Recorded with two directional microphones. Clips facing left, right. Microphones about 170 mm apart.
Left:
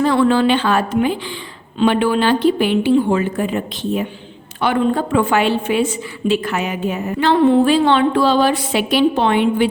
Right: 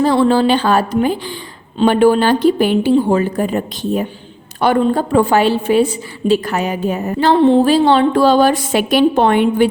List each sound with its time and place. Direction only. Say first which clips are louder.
0.0 s a woman's voice: right 2 dB; 35° right (ahead or behind)